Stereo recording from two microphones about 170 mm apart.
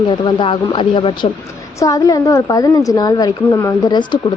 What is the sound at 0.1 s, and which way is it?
A woman's voice, 30° left (ahead or behind).